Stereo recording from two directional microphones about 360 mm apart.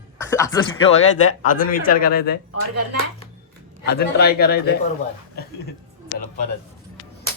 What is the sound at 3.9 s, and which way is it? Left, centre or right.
Speech, left.